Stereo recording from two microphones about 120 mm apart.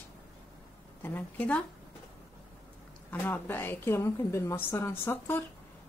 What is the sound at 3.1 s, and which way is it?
A woman's voice, 15° left (ahead or behind).